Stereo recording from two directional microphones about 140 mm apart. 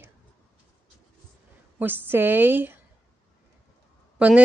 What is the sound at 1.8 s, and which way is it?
A woman's voice, 15° right (ahead or behind).